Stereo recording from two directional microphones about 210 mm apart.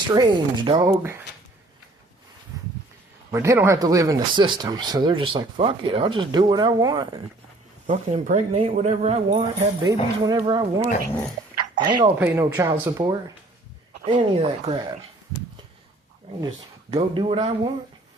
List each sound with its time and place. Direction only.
0.1 s speech: 20° right (ahead or behind)
3.3 s speech: 15° right (ahead or behind)
7.9 s speech: 35° right (ahead or behind)
12.1 s speech: 10° right (ahead or behind)
14.0 s speech: 25° right (ahead or behind)
16.9 s speech: 25° right (ahead or behind)